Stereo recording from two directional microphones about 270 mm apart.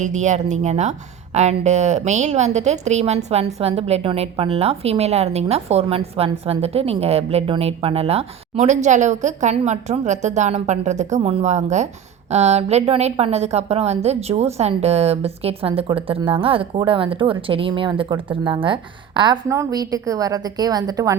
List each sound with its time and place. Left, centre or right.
0.0 s speech: right